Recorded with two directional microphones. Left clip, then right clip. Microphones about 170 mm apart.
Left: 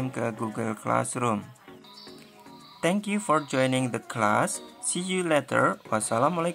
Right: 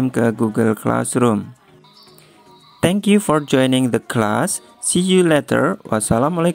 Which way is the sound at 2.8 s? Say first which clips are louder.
Right 10 dB; 40° right (ahead or behind).